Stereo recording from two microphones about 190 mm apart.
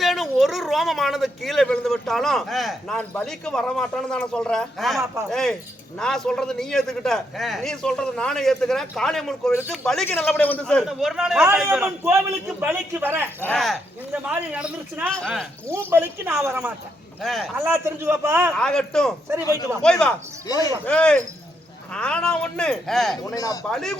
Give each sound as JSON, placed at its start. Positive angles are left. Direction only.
{"t": 0.0, "sound": "speech", "side_deg": 0}
{"t": 13.4, "sound": "speech", "side_deg": 0}
{"t": 15.6, "sound": "speech", "side_deg": -10}
{"t": 18.5, "sound": "speech", "side_deg": 5}
{"t": 19.4, "sound": "speech", "side_deg": 20}
{"t": 19.8, "sound": "speech", "side_deg": 5}
{"t": 20.5, "sound": "speech", "side_deg": 20}
{"t": 20.8, "sound": "speech", "side_deg": 5}
{"t": 23.2, "sound": "speech", "side_deg": 20}
{"t": 23.6, "sound": "speech", "side_deg": 0}